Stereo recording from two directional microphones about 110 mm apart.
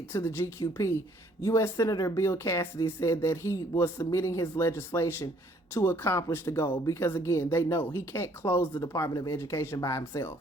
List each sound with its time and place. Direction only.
0.1 s speech: 20° left (ahead or behind)